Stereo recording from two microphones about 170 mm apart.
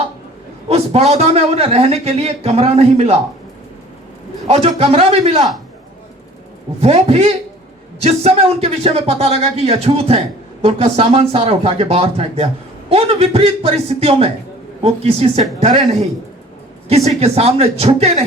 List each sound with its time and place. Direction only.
0.7 s a man's voice: 35° right (ahead or behind)
4.4 s speech: 35° right (ahead or behind)
6.8 s speech: 35° right (ahead or behind)
16.9 s speech: 40° right (ahead or behind)